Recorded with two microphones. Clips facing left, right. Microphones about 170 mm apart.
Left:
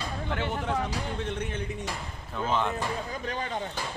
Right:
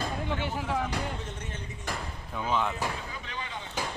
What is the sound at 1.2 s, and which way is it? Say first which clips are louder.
Speech: left 7 dB; 60° left (ahead or behind).